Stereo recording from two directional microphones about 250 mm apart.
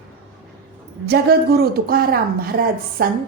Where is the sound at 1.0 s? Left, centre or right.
Right.